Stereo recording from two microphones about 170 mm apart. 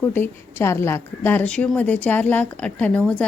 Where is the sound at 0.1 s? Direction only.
15° left (ahead or behind).